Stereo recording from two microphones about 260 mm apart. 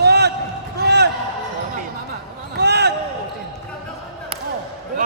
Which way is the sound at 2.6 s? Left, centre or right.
Right.